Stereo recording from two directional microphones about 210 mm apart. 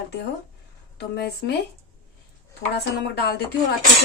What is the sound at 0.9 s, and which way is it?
Speech, 50° left (ahead or behind).